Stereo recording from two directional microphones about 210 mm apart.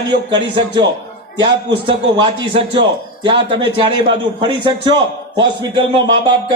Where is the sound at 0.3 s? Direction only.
20° right (ahead or behind).